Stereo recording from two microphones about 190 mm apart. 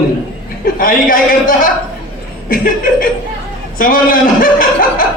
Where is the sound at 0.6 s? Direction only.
50° left (ahead or behind).